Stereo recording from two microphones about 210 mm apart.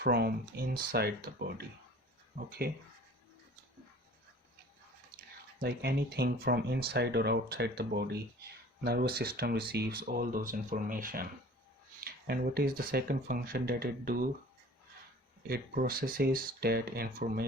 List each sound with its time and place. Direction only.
0.0 s speech: 50° right (ahead or behind)
2.6 s speech: 45° right (ahead or behind)
5.1 s speech: 50° right (ahead or behind)
15.4 s speech: 45° right (ahead or behind)